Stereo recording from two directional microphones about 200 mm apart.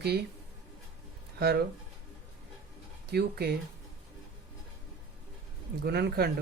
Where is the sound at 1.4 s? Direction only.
50° right (ahead or behind).